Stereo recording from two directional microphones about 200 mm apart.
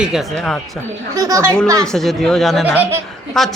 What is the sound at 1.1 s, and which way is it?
Speech, 15° right (ahead or behind).